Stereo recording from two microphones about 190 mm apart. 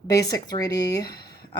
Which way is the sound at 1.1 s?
55° left (ahead or behind).